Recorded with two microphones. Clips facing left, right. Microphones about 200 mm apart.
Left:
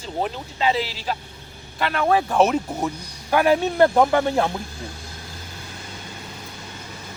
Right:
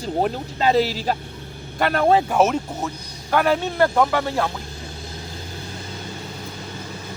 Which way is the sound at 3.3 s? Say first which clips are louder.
Left 2 dB; 15° left (ahead or behind).